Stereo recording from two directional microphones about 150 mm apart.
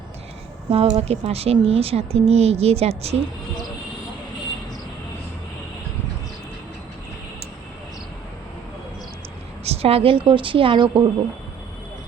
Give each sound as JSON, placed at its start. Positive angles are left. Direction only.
{"t": 0.7, "sound": "speech", "side_deg": -45}
{"t": 9.6, "sound": "a woman's voice", "side_deg": -40}